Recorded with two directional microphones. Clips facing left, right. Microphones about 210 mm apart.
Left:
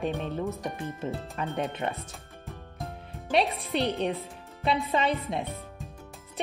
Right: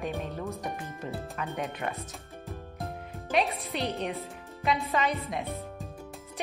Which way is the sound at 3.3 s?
30° left (ahead or behind).